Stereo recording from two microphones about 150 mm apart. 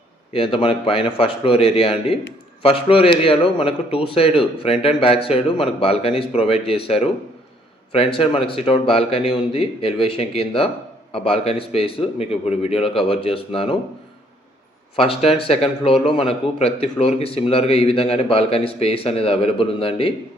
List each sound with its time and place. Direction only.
0.3 s speech: 35° left (ahead or behind)
14.9 s speech: 40° left (ahead or behind)